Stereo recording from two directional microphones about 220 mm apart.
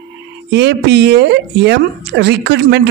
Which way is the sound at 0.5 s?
50° right (ahead or behind).